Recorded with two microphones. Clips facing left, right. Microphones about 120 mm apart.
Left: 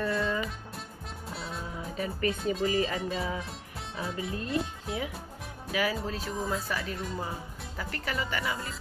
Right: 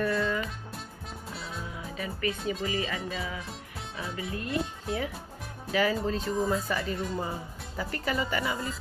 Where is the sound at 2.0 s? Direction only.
40° left (ahead or behind).